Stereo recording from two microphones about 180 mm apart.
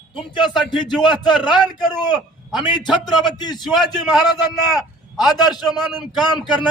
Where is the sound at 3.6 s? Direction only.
Centre (ahead or behind).